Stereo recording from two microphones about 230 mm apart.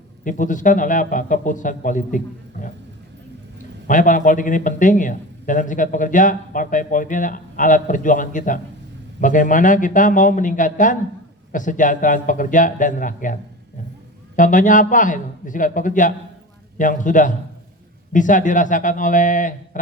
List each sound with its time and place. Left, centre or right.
0.3 s a man's voice: left
3.8 s a man's voice: left